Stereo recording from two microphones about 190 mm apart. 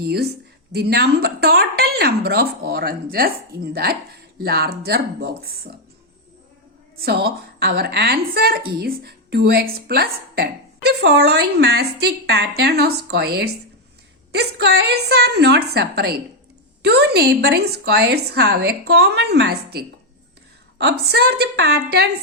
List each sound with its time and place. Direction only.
0.0 s a woman's voice: 55° right (ahead or behind)
7.0 s a woman's voice: 55° right (ahead or behind)